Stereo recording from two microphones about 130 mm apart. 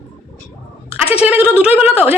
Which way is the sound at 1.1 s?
10° right (ahead or behind).